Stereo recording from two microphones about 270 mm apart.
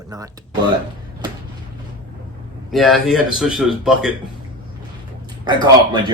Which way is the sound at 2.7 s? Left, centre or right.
Centre.